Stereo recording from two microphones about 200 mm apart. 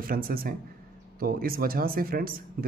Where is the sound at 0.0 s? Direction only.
45° right (ahead or behind).